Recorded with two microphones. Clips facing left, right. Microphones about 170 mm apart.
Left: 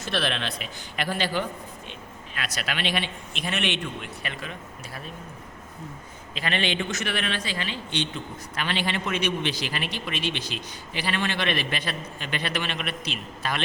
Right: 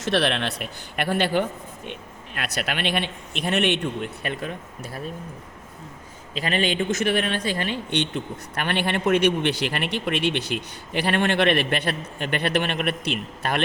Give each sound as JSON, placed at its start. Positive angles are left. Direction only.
{"t": 0.0, "sound": "speech", "side_deg": -65}
{"t": 6.3, "sound": "speech", "side_deg": -40}